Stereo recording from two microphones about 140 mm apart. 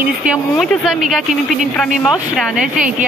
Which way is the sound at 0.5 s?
Centre (ahead or behind).